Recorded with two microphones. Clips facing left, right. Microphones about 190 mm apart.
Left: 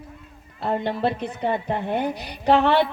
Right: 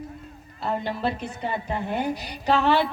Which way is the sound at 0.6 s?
60° left (ahead or behind).